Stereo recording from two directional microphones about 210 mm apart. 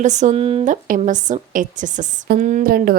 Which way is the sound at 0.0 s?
35° right (ahead or behind).